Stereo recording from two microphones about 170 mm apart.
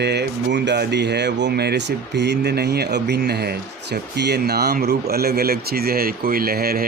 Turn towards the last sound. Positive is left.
turn(degrees=-60)  # may be behind; listen again after turning